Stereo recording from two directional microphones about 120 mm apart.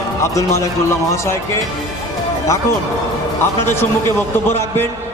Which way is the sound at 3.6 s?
20° left (ahead or behind).